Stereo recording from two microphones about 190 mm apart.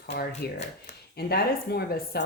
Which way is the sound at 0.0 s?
55° left (ahead or behind).